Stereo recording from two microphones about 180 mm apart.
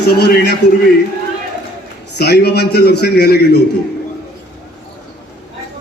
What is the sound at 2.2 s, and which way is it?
A man's voice, 65° left (ahead or behind).